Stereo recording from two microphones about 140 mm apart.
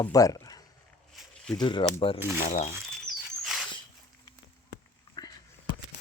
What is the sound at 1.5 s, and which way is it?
Speech, 35° left (ahead or behind).